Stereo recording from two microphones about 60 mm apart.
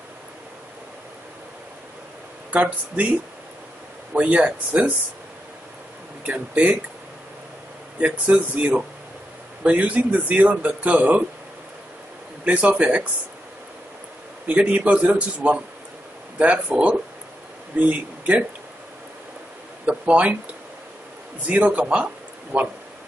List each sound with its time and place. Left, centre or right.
2.5 s speech: right
4.1 s speech: right
6.2 s speech: right
8.0 s speech: right
12.4 s speech: right
14.5 s speech: right
19.9 s speech: right
21.5 s speech: right